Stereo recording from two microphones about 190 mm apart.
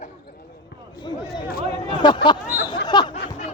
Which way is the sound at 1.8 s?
25° left (ahead or behind).